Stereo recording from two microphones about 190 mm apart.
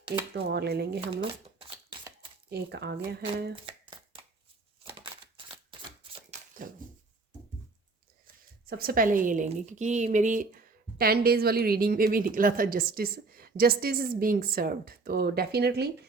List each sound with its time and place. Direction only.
0.3 s speech: 60° right (ahead or behind)
1.1 s shuffling cards: 25° right (ahead or behind)
2.5 s speech: 60° right (ahead or behind)
3.5 s shuffling cards: 25° right (ahead or behind)
4.9 s a sound: 25° right (ahead or behind)
8.8 s speech: 50° right (ahead or behind)